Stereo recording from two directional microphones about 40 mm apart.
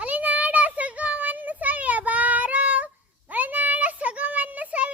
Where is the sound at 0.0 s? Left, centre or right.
Right.